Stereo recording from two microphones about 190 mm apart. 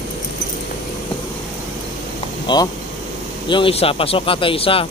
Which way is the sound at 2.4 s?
20° left (ahead or behind).